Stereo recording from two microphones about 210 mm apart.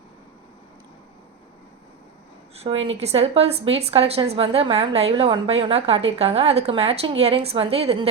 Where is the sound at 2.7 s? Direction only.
65° right (ahead or behind).